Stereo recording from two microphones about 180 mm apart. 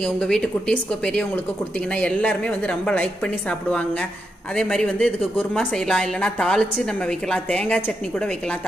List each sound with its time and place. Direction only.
0.0 s a woman's voice: 5° left (ahead or behind)